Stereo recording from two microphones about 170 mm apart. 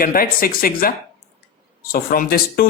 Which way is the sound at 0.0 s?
60° left (ahead or behind).